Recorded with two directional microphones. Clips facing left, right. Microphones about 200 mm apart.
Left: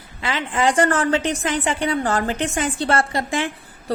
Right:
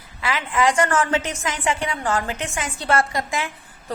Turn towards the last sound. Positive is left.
turn(degrees=30)  # may be behind; listen again after turning